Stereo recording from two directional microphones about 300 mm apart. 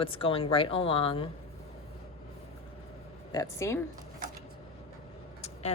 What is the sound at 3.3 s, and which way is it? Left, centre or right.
Speech, centre.